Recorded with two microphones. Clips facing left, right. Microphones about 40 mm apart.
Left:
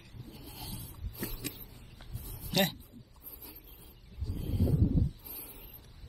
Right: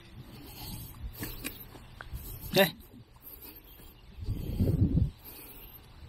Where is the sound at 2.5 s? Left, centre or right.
Centre.